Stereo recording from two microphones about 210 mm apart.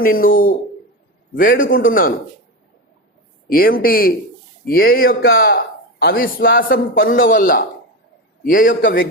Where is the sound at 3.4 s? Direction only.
45° left (ahead or behind).